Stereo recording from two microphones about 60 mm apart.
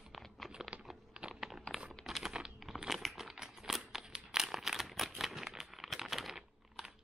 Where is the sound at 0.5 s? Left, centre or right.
Centre.